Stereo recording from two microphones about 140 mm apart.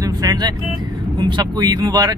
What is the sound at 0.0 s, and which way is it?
Speech, 25° right (ahead or behind).